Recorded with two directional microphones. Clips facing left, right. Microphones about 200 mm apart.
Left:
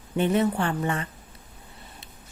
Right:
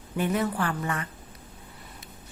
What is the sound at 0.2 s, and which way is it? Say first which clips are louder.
Speech: left 4 dB; 25° left (ahead or behind).